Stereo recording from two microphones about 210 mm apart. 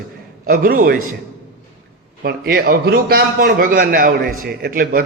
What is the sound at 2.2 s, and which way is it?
A man's voice, 45° right (ahead or behind).